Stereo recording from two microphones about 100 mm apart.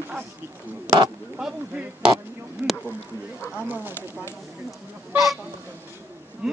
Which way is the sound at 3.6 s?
20° right (ahead or behind).